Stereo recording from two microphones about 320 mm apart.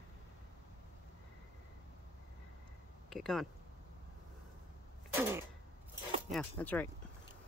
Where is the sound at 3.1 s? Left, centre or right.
Centre.